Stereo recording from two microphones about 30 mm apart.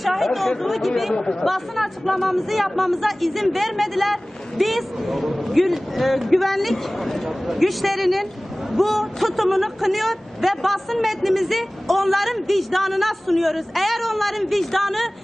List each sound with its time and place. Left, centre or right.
0.0 s chatter: centre
0.6 s speech: centre
1.2 s speech: centre
1.5 s speech: centre